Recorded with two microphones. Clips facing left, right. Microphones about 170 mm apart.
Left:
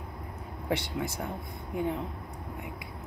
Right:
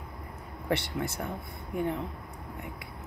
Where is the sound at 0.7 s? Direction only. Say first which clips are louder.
Right 1 dB; 10° left (ahead or behind).